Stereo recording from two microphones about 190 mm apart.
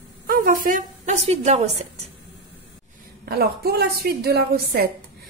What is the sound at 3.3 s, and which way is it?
A woman's voice, 55° right (ahead or behind).